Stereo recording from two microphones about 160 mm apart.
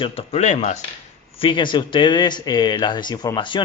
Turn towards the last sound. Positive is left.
turn(degrees=25)  # may be behind; listen again after turning